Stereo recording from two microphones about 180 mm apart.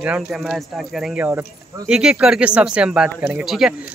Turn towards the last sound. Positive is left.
turn(degrees=-5)  # may be behind; listen again after turning